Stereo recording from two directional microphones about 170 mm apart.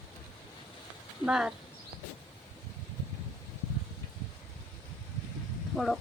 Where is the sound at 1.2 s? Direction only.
5° right (ahead or behind).